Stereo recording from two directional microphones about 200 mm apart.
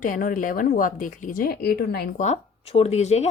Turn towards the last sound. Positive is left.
turn(degrees=35)  # may be behind; listen again after turning